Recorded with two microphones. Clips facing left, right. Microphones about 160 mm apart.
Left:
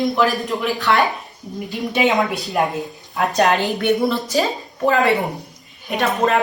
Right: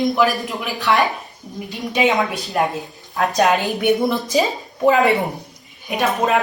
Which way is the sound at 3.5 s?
15° right (ahead or behind).